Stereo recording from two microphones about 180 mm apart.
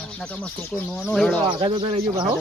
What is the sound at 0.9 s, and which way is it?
Speech, centre (ahead or behind).